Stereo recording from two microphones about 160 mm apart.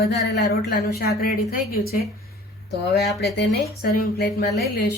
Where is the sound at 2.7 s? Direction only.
90° left.